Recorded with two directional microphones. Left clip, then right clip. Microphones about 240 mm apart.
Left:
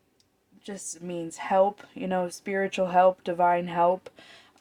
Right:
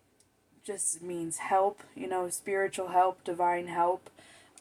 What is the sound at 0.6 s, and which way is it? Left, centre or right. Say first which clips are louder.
Speech: even; left.